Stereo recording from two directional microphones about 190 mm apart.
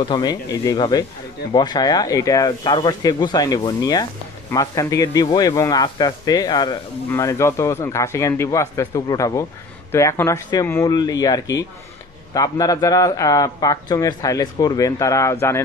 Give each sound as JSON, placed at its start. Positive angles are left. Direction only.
{"t": 0.0, "sound": "speech", "side_deg": 20}